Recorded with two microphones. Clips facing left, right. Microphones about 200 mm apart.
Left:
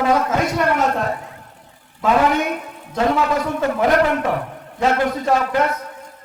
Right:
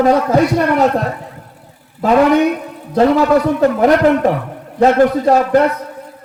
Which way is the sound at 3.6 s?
40° right (ahead or behind).